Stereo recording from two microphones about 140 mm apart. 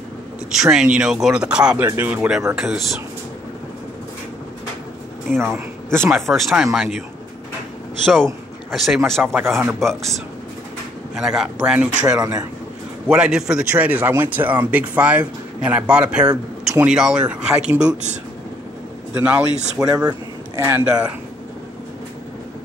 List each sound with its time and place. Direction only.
0.5 s speech: 5° right (ahead or behind)
5.4 s speech: 20° right (ahead or behind)
6.0 s speech: centre (ahead or behind)
8.0 s speech: 5° left (ahead or behind)
9.2 s speech: 15° right (ahead or behind)
11.1 s speech: 5° right (ahead or behind)
12.2 s a man's voice: 25° right (ahead or behind)
13.1 s speech: 5° right (ahead or behind)
19.1 s speech: 10° right (ahead or behind)
19.8 s speech: 25° right (ahead or behind)